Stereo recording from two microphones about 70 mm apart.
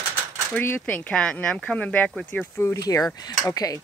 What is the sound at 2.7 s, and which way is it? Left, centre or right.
Speech, left.